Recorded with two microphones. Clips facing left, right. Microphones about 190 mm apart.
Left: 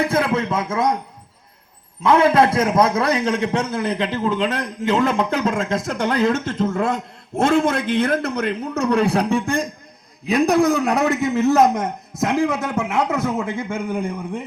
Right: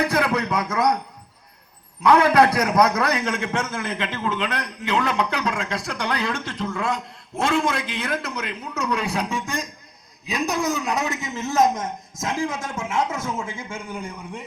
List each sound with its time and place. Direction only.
0.0 s a man's voice: 25° left (ahead or behind)
2.0 s a man's voice: 25° left (ahead or behind); by 14.4 s 55° left (ahead or behind)